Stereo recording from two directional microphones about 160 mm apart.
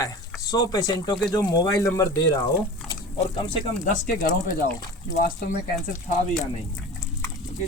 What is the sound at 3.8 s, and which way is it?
Speech, 65° left (ahead or behind).